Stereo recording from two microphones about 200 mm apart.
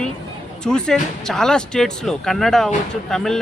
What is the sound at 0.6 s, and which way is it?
Speech, 5° left (ahead or behind).